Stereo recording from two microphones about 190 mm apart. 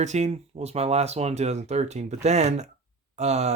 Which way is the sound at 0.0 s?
35° right (ahead or behind).